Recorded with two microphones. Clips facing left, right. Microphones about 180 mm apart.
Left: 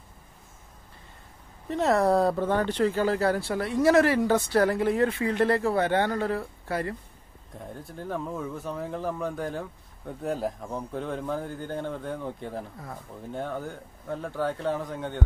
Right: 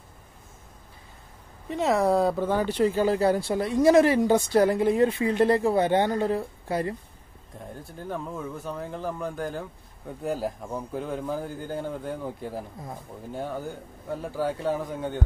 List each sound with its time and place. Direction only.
1.7 s speech: centre (ahead or behind); by 7.0 s 20° right (ahead or behind)
7.7 s speech: centre (ahead or behind)